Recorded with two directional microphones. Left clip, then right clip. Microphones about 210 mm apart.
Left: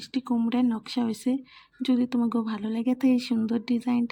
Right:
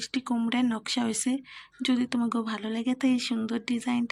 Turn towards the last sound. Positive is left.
turn(degrees=10)  # may be behind; listen again after turning